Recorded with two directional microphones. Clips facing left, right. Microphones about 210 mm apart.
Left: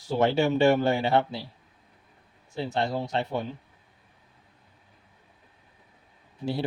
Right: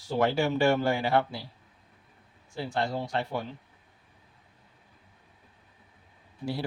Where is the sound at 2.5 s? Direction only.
25° left (ahead or behind).